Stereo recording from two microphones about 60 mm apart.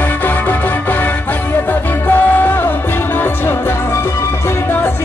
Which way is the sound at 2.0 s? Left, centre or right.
Left.